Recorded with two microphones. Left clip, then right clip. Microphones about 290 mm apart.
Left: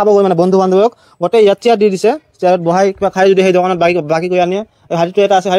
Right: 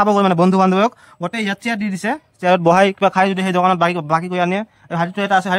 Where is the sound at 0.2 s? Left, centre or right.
Centre.